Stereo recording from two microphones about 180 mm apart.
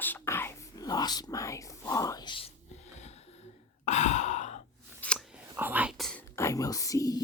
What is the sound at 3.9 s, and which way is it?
Sigh, 40° left (ahead or behind).